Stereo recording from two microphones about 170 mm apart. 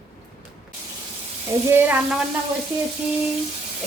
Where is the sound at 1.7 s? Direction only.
15° right (ahead or behind).